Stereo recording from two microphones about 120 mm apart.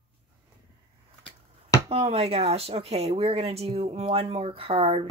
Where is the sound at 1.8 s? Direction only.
60° right (ahead or behind).